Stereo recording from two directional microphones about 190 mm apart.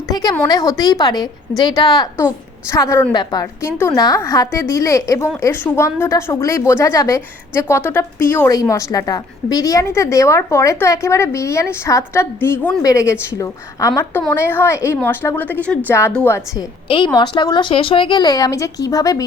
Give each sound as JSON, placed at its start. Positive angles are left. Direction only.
{"t": 0.1, "sound": "a woman's voice", "side_deg": 20}
{"t": 16.9, "sound": "a woman's voice", "side_deg": 25}